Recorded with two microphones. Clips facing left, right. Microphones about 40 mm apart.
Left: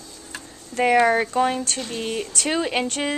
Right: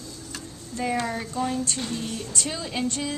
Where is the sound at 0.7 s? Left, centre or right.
Left.